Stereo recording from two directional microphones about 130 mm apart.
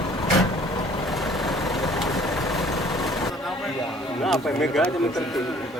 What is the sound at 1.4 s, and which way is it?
Vehicle, centre (ahead or behind).